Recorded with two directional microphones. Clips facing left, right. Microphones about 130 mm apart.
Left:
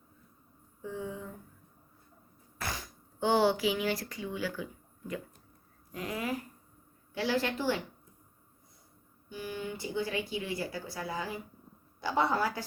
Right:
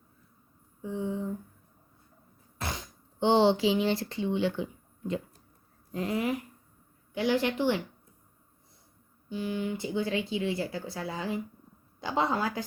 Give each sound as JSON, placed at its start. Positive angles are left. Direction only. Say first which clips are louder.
{"t": 0.8, "sound": "a sound", "louder": "right 6 dB", "side_deg": -20}
{"t": 2.6, "sound": "a woman's voice", "louder": "right 2 dB", "side_deg": -20}
{"t": 9.3, "sound": "speech", "louder": "right 6 dB", "side_deg": -20}